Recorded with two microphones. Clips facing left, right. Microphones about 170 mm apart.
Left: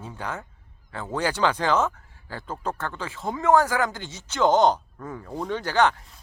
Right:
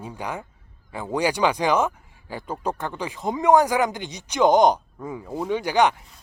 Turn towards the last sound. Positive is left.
turn(degrees=-15)  # may be behind; listen again after turning